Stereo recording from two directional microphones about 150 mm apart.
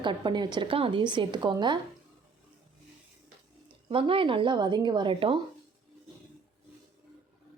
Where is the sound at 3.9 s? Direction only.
35° right (ahead or behind).